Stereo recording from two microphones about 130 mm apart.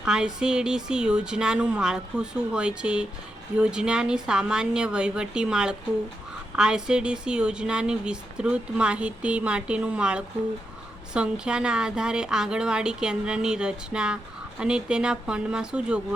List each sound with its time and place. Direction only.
0.0 s a woman's voice: 5° right (ahead or behind)